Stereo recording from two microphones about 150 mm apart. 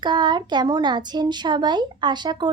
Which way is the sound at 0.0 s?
30° right (ahead or behind).